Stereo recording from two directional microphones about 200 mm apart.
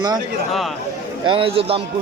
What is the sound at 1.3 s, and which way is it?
Speech, 25° right (ahead or behind).